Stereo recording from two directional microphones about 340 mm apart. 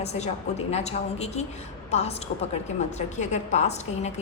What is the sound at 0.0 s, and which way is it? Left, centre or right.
A woman's voice, centre.